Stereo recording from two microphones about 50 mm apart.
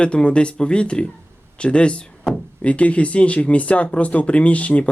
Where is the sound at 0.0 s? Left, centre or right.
Left.